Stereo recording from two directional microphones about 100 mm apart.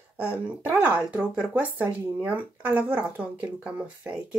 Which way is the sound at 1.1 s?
10° right (ahead or behind).